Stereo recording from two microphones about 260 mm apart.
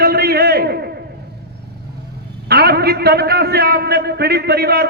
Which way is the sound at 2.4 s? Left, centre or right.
Right.